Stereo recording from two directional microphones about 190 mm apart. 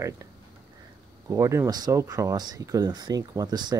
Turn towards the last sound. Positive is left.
turn(degrees=-20)  # may be behind; listen again after turning